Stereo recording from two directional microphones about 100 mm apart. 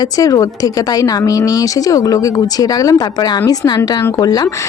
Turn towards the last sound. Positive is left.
turn(degrees=40)  # may be behind; listen again after turning